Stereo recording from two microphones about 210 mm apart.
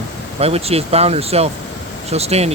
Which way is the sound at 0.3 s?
30° right (ahead or behind).